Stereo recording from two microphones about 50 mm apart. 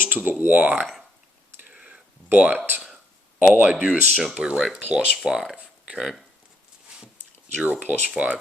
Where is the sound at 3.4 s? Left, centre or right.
Right.